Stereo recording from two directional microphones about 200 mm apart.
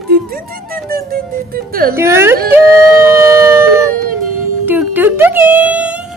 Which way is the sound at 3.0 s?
15° right (ahead or behind).